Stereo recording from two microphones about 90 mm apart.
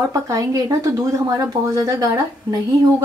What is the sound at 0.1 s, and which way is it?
Speech, 35° right (ahead or behind).